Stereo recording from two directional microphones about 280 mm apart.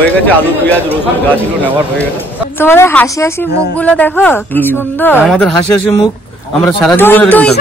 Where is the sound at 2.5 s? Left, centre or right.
Centre.